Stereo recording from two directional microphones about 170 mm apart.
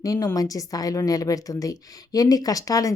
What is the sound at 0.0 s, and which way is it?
Speech, 20° left (ahead or behind).